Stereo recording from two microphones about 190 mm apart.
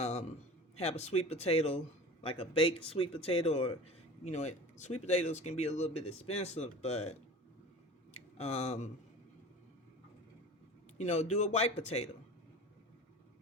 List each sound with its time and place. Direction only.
0.0 s a sound: 35° left (ahead or behind)
0.8 s speech: 35° left (ahead or behind)
8.4 s speech: 35° left (ahead or behind)
10.9 s speech: 35° left (ahead or behind)